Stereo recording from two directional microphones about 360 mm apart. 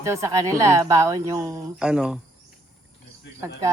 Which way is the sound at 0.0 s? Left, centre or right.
Centre.